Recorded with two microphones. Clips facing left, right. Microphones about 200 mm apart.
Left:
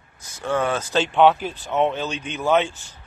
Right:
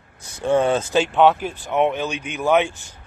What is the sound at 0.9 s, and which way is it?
Speech, 5° right (ahead or behind).